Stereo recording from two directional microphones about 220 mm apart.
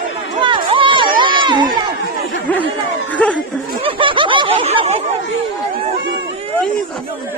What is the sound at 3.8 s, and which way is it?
Snicker, 25° right (ahead or behind).